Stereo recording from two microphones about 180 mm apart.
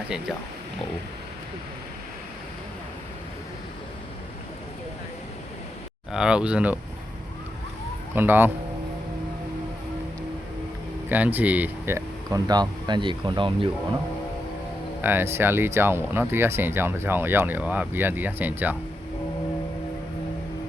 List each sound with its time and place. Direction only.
6.1 s speech: 5° right (ahead or behind)
8.1 s speech: 10° right (ahead or behind)
11.1 s speech: 10° right (ahead or behind); by 13.7 s 25° right (ahead or behind)
15.0 s speech: 15° right (ahead or behind)